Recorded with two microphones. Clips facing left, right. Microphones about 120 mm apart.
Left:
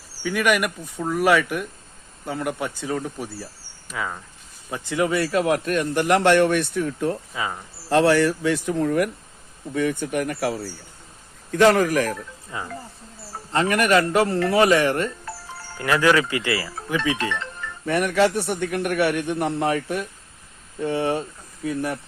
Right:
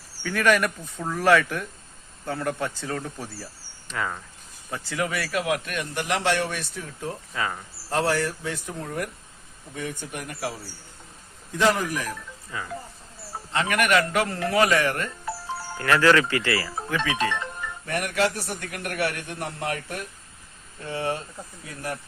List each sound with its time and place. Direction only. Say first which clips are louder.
0.2 s speech: left 1 dB; 10° left (ahead or behind)
4.7 s speech: left 6 dB; 20° left (ahead or behind); by 7.2 s 65° left (ahead or behind)
7.3 s speech: left 1 dB; 10° left (ahead or behind)
7.9 s speech: left 7 dB; 85° left
9.7 s speech: left 10 dB; 70° left (ahead or behind)
11.5 s speech: left 7 dB; 70° left (ahead or behind)
12.5 s speech: left 2 dB; 25° left (ahead or behind)
13.5 s a man's voice: left 4 dB; 35° left (ahead or behind)
15.9 s speech: even; 10° left (ahead or behind)
17.2 s music: right 1 dB; 20° right (ahead or behind)
17.9 s speech: left 6 dB; 65° left (ahead or behind)
20.8 s speech: left 6 dB; 20° left (ahead or behind)